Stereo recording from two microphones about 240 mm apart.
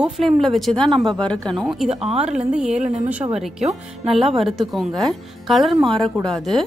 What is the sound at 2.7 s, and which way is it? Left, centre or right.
Speech, right.